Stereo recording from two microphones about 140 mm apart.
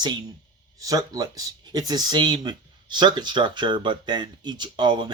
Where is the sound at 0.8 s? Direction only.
25° right (ahead or behind).